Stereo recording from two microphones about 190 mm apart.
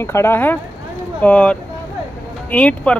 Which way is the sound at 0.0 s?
15° left (ahead or behind).